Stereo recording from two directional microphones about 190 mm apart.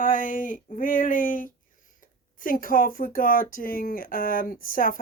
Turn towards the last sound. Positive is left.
turn(degrees=45)  # may be behind; listen again after turning